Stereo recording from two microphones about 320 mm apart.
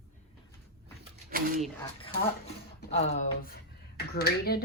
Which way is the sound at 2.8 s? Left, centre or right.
Centre.